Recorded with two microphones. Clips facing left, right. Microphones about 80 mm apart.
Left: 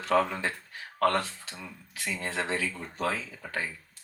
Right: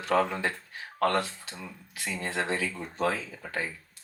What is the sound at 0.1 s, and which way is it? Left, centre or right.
Speech, right.